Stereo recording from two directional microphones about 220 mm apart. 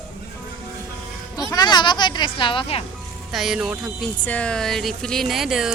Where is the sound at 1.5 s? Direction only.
20° left (ahead or behind).